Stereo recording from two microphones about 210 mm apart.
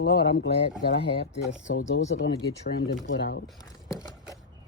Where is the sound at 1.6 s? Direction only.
65° left (ahead or behind).